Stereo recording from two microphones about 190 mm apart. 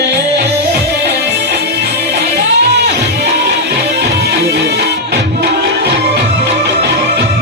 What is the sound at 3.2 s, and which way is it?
Music, 60° right (ahead or behind).